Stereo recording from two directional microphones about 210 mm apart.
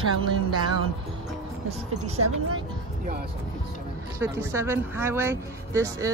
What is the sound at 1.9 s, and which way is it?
Speech, 90° right.